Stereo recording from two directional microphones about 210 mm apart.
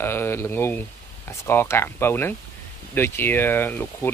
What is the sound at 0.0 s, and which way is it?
Speech, 10° left (ahead or behind).